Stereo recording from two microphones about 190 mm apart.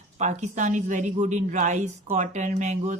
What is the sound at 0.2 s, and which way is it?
A woman's voice, 40° right (ahead or behind).